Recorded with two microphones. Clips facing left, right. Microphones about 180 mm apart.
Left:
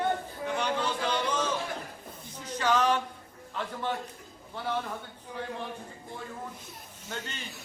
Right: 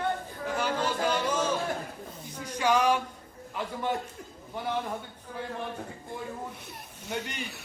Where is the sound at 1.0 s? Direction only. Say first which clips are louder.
Right 2 dB; 10° right (ahead or behind).